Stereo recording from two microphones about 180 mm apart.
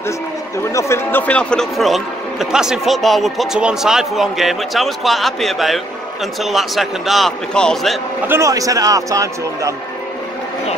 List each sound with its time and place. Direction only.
0.7 s a man's voice: 15° left (ahead or behind)
8.3 s a man's voice: 15° right (ahead or behind)